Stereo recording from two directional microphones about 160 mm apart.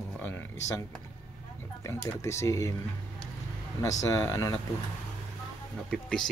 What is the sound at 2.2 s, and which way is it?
Speech, 20° left (ahead or behind).